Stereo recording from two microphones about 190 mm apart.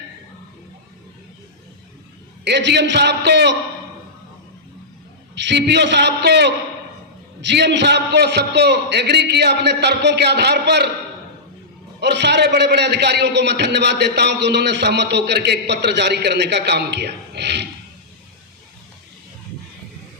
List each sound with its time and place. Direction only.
2.4 s a man's voice: 65° right (ahead or behind)
5.3 s a man's voice: 65° right (ahead or behind)
11.9 s a man's voice: 60° right (ahead or behind)